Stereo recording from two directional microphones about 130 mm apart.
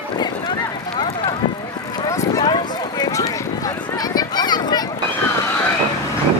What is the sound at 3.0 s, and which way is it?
Run, 25° left (ahead or behind).